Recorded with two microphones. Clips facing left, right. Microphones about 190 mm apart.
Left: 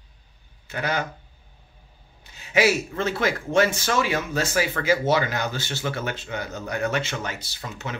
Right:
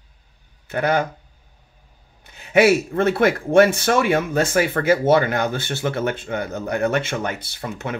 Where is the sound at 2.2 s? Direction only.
55° right (ahead or behind).